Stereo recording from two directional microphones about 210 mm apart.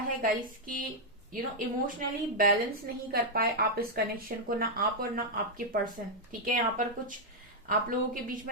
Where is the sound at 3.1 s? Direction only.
45° right (ahead or behind).